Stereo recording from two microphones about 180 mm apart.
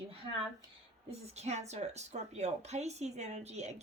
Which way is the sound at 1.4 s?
40° right (ahead or behind).